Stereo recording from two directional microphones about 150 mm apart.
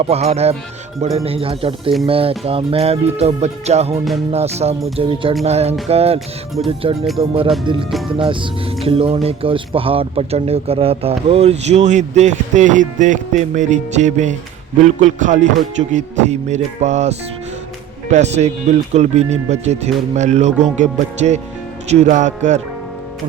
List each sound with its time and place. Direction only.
0.0 s speech: 45° right (ahead or behind)
8.8 s a man's voice: 40° right (ahead or behind)